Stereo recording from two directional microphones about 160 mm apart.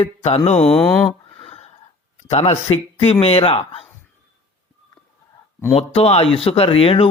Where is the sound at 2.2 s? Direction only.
40° left (ahead or behind).